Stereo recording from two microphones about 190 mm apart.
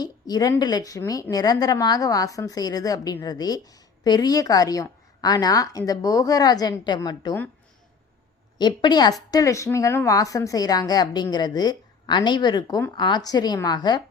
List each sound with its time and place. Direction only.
0.0 s speech: 20° left (ahead or behind)
8.5 s speech: 20° left (ahead or behind)